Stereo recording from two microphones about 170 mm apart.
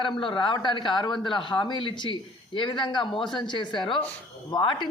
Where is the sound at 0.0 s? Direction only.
30° left (ahead or behind).